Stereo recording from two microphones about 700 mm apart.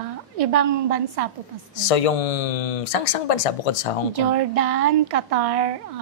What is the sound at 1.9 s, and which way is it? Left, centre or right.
Speech, left.